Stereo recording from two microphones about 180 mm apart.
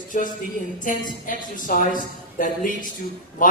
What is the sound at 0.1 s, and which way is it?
A woman's voice, 45° left (ahead or behind).